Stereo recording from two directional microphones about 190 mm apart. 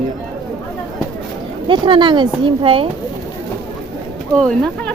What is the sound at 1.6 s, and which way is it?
Speech, 25° right (ahead or behind).